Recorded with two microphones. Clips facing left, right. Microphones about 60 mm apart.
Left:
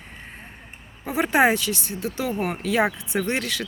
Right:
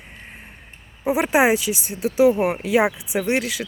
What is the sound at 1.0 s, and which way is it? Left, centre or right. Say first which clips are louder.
Speech: right 2 dB; centre.